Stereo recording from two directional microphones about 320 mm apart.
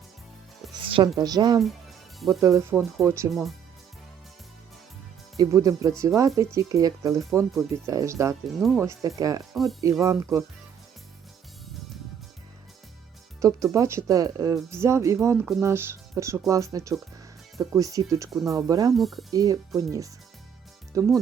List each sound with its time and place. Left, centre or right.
0.7 s music: centre
1.2 s speech: centre
2.1 s speech: centre
5.4 s speech: centre
13.4 s speech: centre
18.9 s speech: centre
19.3 s speech: centre